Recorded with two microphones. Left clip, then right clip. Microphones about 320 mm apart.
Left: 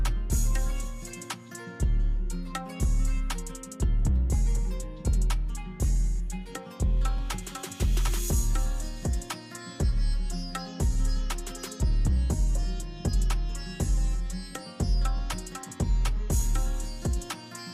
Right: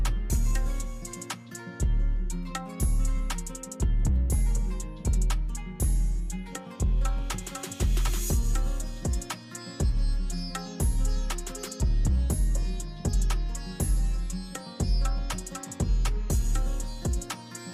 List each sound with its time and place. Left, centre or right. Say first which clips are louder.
0.0 s music: even; centre
2.3 s music: even; centre